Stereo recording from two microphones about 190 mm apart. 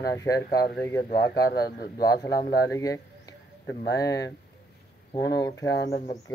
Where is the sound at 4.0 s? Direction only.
20° left (ahead or behind).